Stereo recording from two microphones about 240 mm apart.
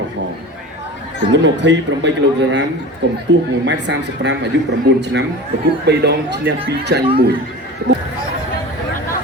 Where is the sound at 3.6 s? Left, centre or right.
Right.